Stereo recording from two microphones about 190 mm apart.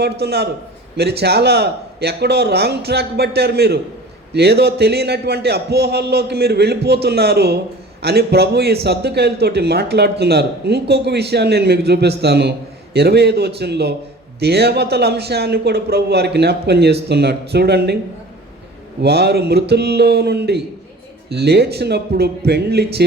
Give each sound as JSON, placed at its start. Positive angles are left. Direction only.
{"t": 0.0, "sound": "a man's voice", "side_deg": -60}
{"t": 19.0, "sound": "a man's voice", "side_deg": -60}